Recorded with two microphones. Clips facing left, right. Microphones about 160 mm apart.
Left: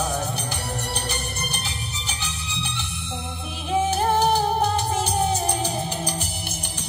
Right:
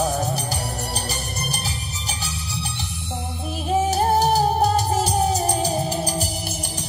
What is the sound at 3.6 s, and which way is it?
Music, 35° right (ahead or behind).